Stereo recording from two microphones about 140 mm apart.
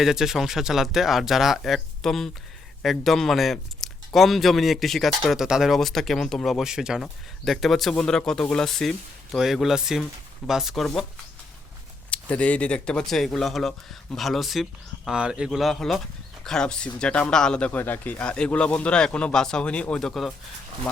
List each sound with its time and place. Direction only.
0.0 s speech: 5° right (ahead or behind)
12.1 s speech: 10° left (ahead or behind)